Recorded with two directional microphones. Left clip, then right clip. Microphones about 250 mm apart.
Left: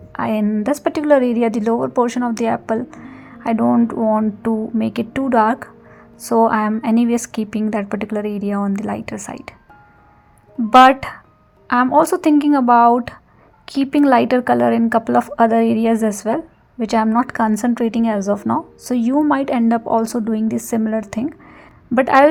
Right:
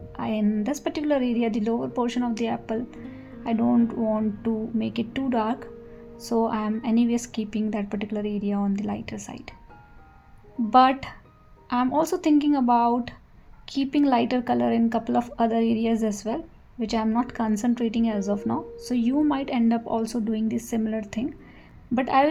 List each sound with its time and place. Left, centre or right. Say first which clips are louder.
0.1 s a woman's voice: left 8 dB; left
10.7 s a woman's voice: left 9 dB; left